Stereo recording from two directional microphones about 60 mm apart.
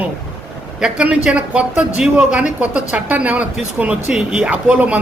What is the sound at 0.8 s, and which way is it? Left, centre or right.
Speech, centre.